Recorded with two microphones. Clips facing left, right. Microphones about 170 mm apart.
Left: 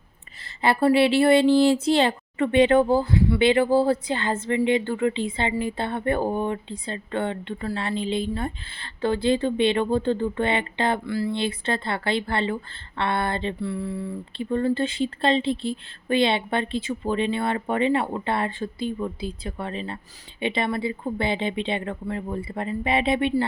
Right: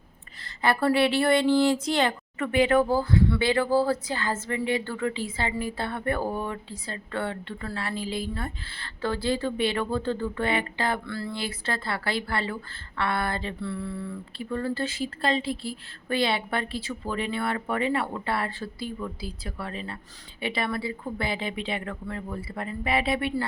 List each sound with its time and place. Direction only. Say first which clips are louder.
0.4 s speech: left 4 dB; 25° left (ahead or behind)
11.0 s a sound: left 7 dB; 10° left (ahead or behind)
11.3 s speech: left 6 dB; 25° left (ahead or behind)